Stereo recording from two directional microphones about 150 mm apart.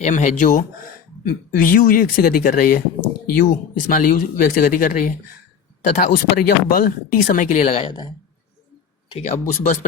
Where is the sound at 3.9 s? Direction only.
65° left (ahead or behind).